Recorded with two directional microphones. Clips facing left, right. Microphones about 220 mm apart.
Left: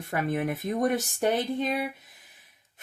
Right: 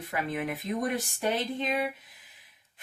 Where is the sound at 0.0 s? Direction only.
45° left (ahead or behind).